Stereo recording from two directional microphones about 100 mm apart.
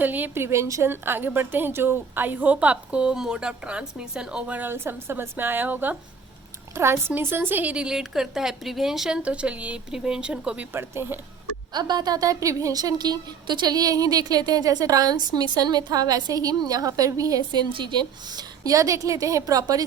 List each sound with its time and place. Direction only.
0.0 s a woman's voice: 20° right (ahead or behind)
10.7 s a woman's voice: 25° right (ahead or behind)
11.7 s a woman's voice: 45° right (ahead or behind)